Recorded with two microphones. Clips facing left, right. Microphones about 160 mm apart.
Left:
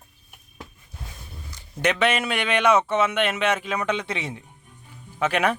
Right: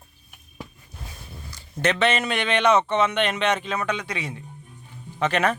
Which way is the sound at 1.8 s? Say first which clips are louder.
Even; 10° left (ahead or behind).